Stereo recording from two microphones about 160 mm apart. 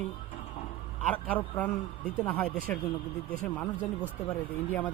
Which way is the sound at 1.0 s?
10° left (ahead or behind).